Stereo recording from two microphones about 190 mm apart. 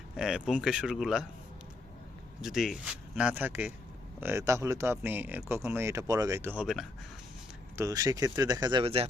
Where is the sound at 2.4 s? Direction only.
Centre (ahead or behind).